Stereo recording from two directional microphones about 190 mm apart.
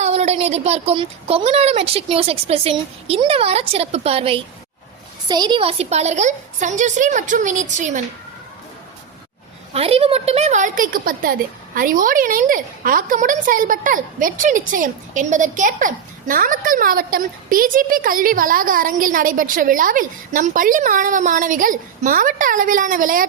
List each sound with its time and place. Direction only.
0.0 s a woman's voice: 35° right (ahead or behind)
9.7 s a woman's voice: 30° right (ahead or behind)